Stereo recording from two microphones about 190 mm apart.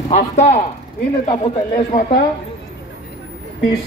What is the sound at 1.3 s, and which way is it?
Speech, 40° left (ahead or behind).